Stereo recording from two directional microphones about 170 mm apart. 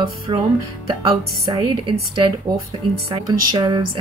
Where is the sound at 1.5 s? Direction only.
30° right (ahead or behind).